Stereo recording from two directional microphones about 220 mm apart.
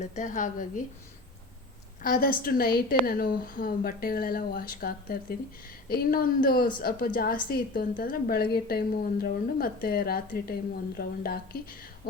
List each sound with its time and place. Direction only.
0.0 s a woman's voice: 35° left (ahead or behind)
2.0 s a woman's voice: 40° left (ahead or behind)